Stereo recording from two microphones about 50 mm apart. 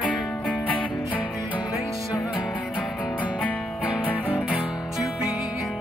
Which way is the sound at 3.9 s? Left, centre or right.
Right.